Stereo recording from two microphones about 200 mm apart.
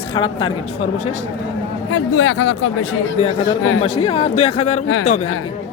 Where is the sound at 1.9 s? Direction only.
75° left (ahead or behind).